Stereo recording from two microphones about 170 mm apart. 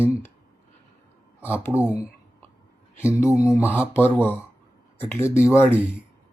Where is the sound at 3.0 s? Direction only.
15° left (ahead or behind).